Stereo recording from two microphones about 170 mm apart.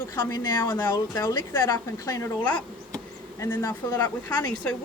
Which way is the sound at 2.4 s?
10° left (ahead or behind).